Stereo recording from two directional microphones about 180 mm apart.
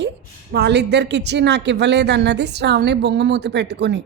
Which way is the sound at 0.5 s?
70° right (ahead or behind).